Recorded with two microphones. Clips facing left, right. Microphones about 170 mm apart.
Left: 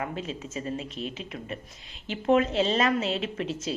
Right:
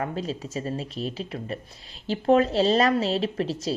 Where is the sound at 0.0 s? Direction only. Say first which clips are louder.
Right 4 dB; 35° right (ahead or behind).